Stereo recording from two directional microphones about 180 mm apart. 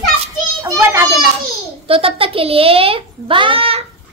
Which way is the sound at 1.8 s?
30° right (ahead or behind).